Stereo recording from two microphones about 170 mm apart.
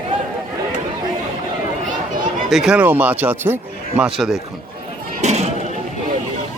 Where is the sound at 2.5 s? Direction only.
5° right (ahead or behind).